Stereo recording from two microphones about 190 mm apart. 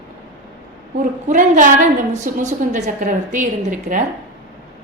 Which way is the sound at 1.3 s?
40° right (ahead or behind).